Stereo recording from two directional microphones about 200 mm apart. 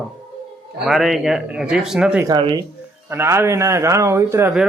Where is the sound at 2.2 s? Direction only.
20° right (ahead or behind).